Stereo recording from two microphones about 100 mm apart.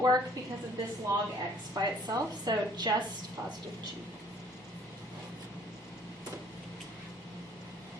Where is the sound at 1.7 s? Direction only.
40° right (ahead or behind).